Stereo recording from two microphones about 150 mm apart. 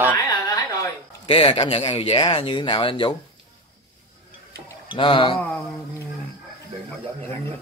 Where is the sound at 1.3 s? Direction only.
40° left (ahead or behind).